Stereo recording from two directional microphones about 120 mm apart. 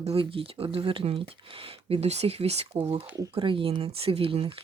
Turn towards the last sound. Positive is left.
turn(degrees=-50)  # may be behind; listen again after turning